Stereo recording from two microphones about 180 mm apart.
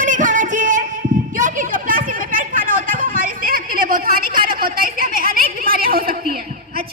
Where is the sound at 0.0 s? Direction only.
45° right (ahead or behind).